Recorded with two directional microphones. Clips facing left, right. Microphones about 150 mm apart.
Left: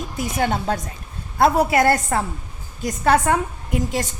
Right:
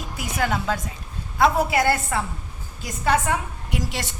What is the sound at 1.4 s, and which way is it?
A woman's voice, 50° left (ahead or behind).